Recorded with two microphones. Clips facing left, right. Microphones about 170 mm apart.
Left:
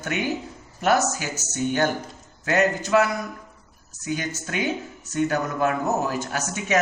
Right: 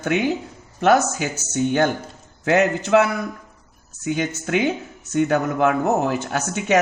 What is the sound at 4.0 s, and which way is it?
Speech, 65° right (ahead or behind).